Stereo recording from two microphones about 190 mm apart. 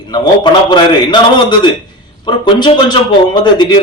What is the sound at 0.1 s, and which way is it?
A man's voice, 25° left (ahead or behind).